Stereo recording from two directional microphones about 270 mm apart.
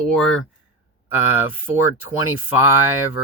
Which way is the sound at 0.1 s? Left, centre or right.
Centre.